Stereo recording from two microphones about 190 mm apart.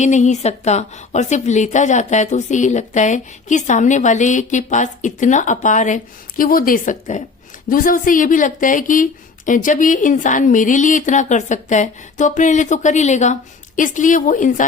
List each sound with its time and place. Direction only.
0.0 s a woman's voice: 40° left (ahead or behind)